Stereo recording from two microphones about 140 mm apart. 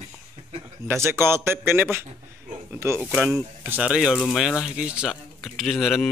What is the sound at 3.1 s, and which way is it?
A man's voice, 5° right (ahead or behind).